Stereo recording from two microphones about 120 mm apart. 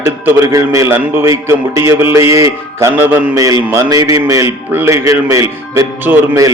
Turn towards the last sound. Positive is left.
turn(degrees=-20)  # may be behind; listen again after turning